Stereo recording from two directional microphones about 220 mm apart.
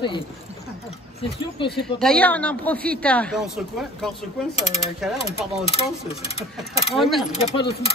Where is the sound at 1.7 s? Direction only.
Centre (ahead or behind).